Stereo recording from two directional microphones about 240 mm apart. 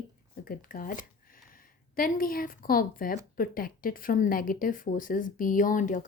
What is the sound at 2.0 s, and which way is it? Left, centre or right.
Speech, left.